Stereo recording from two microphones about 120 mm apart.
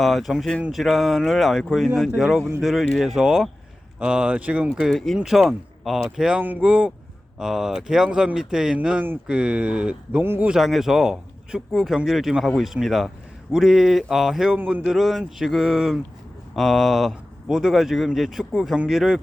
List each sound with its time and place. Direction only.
0.0 s speech: centre (ahead or behind); by 10.5 s 15° right (ahead or behind)
10.5 s speech: centre (ahead or behind)